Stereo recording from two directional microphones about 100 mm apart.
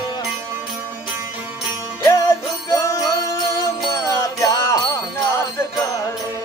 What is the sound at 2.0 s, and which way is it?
Music, 30° left (ahead or behind).